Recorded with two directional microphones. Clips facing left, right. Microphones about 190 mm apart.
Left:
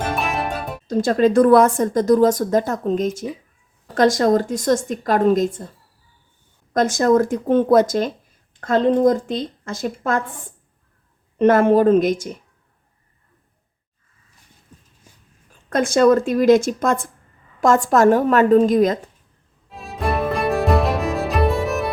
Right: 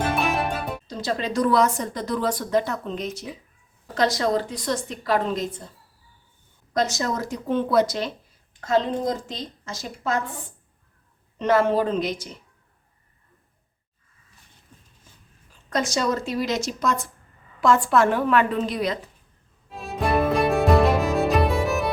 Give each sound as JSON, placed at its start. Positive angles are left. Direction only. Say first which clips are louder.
{"t": 0.0, "sound": "music", "louder": "even", "side_deg": 0}
{"t": 0.9, "sound": "a woman's voice", "louder": "left 14 dB", "side_deg": 50}
{"t": 6.7, "sound": "a woman's voice", "louder": "left 9 dB", "side_deg": 50}
{"t": 11.3, "sound": "a woman's voice", "louder": "left 6 dB", "side_deg": 50}
{"t": 15.7, "sound": "a woman's voice", "louder": "left 9 dB", "side_deg": 55}
{"t": 19.7, "sound": "music", "louder": "even", "side_deg": 0}